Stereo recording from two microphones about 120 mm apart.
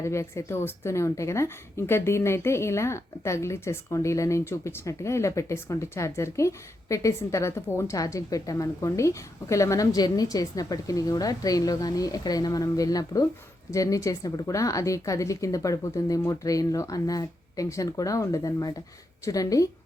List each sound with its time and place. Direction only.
0.0 s a woman's voice: 25° left (ahead or behind)